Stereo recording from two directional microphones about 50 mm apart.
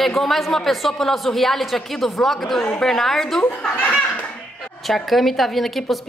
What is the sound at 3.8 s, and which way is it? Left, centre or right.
Speech, left.